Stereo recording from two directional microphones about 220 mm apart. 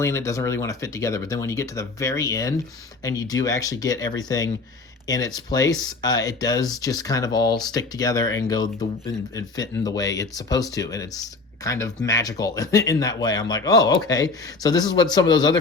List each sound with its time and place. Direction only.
0.0 s speech: 15° left (ahead or behind)